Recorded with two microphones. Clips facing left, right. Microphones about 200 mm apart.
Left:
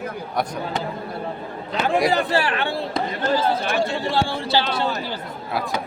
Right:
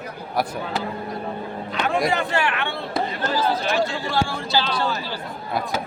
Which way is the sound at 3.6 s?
55° left (ahead or behind).